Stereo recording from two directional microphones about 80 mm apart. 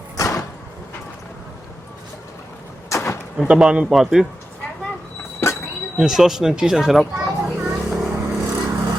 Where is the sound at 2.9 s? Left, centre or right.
Left.